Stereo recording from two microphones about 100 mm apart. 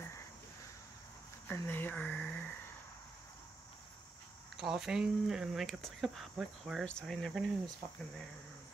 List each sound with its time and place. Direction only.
1.5 s speech: 20° left (ahead or behind)
4.6 s speech: 5° right (ahead or behind)